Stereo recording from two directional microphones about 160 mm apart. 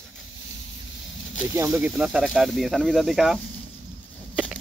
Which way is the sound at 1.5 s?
15° right (ahead or behind).